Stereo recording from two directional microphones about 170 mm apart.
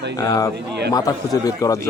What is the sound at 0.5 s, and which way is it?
Speech, 75° right (ahead or behind).